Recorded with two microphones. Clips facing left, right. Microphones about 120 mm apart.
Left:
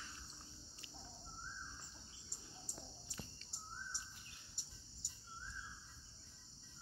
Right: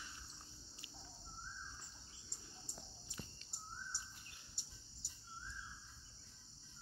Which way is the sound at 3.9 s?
15° left (ahead or behind).